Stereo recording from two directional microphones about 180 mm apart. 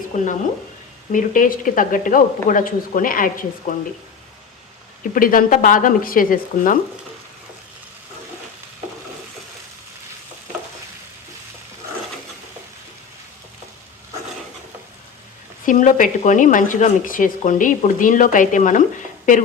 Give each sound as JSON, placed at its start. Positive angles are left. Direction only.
{"t": 0.1, "sound": "speech", "side_deg": 45}
{"t": 5.1, "sound": "speech", "side_deg": 50}
{"t": 15.6, "sound": "speech", "side_deg": 45}